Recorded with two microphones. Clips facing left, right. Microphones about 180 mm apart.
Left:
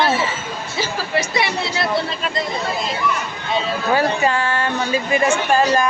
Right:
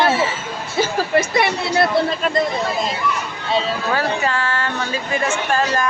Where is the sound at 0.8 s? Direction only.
50° right (ahead or behind).